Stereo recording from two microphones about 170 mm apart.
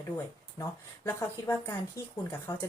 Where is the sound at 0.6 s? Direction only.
20° left (ahead or behind).